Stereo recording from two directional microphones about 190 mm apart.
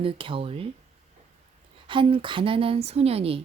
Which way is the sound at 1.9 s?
25° right (ahead or behind).